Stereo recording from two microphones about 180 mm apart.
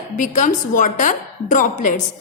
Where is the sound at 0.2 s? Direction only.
45° left (ahead or behind).